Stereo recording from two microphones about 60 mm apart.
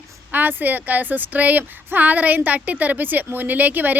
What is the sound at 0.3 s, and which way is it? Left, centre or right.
A woman's voice, right.